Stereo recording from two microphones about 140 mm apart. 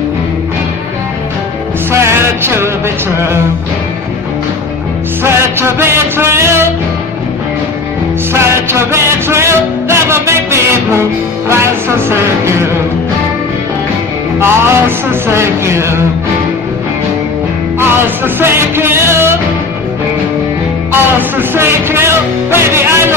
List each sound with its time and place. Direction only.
1.9 s music: 20° right (ahead or behind)
5.2 s music: 15° right (ahead or behind)
8.3 s music: 20° right (ahead or behind)
14.4 s speech: 15° right (ahead or behind)
17.7 s music: 15° right (ahead or behind)
20.9 s music: 15° right (ahead or behind)